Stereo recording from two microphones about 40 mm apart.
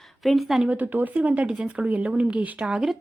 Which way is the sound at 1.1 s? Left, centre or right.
Right.